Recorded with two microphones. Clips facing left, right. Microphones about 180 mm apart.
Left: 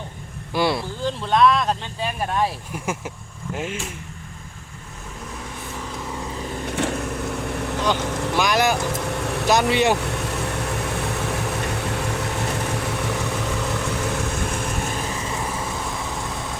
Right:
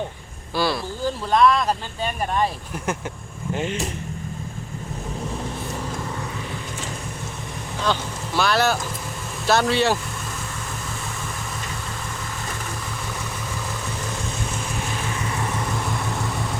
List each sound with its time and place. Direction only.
0.5 s speech: 20° left (ahead or behind)
1.0 s speech: centre (ahead or behind)
6.7 s vehicle: 65° left (ahead or behind)
8.4 s speech: 15° left (ahead or behind)
8.9 s vehicle: 70° left (ahead or behind)
9.5 s speech: 15° left (ahead or behind)
10.0 s vehicle: 70° left (ahead or behind)
14.1 s vehicle: 65° left (ahead or behind)